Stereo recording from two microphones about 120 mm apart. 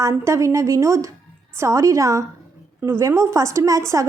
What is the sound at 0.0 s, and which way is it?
Speech, 25° right (ahead or behind).